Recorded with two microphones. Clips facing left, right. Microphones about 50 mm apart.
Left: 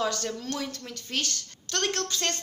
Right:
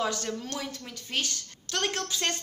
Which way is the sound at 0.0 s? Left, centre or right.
Centre.